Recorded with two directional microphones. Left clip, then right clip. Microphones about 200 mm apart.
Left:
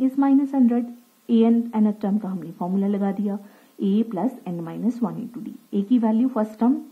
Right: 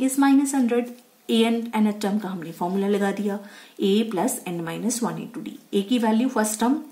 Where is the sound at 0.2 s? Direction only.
40° left (ahead or behind).